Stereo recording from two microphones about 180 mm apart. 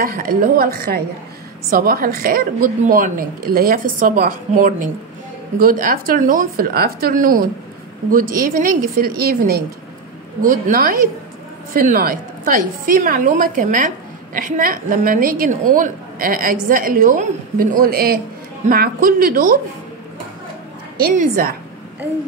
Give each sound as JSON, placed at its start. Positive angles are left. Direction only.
{"t": 0.0, "sound": "a woman's voice", "side_deg": -50}
{"t": 21.0, "sound": "a woman's voice", "side_deg": -55}